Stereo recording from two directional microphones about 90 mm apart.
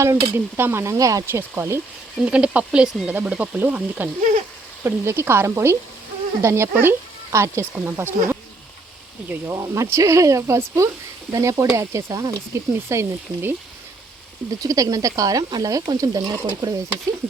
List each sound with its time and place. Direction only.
0.0 s speech: 30° right (ahead or behind)
0.9 s speech: 40° right (ahead or behind)
1.3 s speech: 25° right (ahead or behind)
2.2 s speech: 15° right (ahead or behind)
4.8 s speech: 30° right (ahead or behind)
9.6 s speech: 30° right (ahead or behind)
14.6 s speech: 40° right (ahead or behind)